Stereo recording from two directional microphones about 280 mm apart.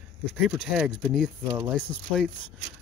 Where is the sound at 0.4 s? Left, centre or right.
Centre.